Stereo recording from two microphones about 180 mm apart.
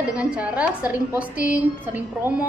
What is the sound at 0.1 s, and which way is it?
A woman's voice, 5° right (ahead or behind).